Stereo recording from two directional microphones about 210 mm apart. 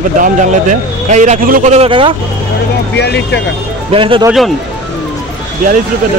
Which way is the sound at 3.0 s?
55° left (ahead or behind).